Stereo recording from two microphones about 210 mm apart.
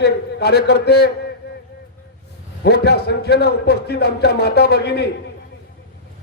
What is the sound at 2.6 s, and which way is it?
A man's voice, 50° left (ahead or behind).